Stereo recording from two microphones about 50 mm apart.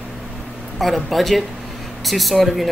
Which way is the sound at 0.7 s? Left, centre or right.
Centre.